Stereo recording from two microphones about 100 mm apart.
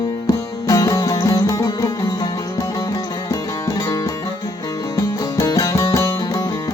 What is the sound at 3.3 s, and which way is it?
Music, 30° left (ahead or behind).